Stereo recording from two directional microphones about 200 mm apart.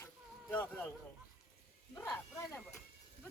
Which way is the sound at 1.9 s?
10° left (ahead or behind).